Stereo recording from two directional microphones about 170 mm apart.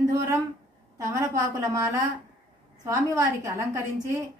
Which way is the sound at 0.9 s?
20° right (ahead or behind).